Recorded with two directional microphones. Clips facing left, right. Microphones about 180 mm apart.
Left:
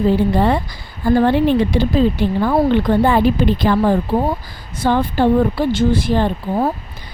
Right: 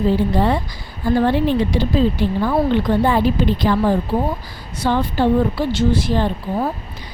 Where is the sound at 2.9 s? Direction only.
50° left (ahead or behind).